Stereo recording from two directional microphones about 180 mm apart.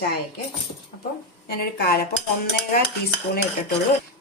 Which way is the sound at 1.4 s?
60° left (ahead or behind).